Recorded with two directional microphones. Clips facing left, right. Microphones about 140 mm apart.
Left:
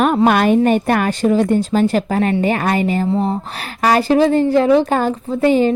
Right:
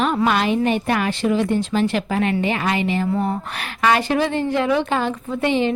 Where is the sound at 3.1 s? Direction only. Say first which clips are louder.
Left 4 dB; 30° left (ahead or behind).